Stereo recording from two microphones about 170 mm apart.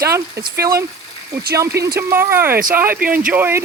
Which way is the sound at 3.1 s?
10° right (ahead or behind).